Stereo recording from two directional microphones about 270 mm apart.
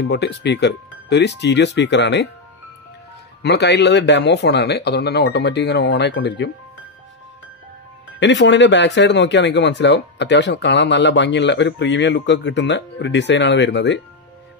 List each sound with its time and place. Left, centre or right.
0.1 s speech: left
3.4 s speech: left
8.2 s speech: left